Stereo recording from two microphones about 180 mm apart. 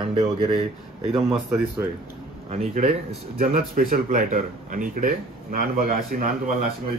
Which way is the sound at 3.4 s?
50° right (ahead or behind).